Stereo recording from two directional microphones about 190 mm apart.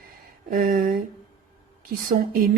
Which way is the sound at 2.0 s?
50° right (ahead or behind).